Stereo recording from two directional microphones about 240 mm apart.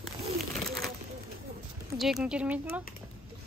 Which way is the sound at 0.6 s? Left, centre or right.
Right.